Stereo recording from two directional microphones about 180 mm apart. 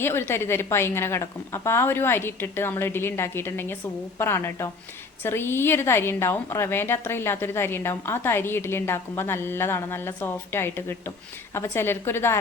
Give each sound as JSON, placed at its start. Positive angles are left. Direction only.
{"t": 0.0, "sound": "a woman's voice", "side_deg": 15}